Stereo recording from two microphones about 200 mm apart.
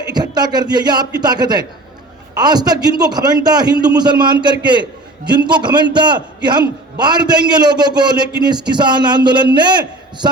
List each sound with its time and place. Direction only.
0.1 s a man's voice: 20° right (ahead or behind)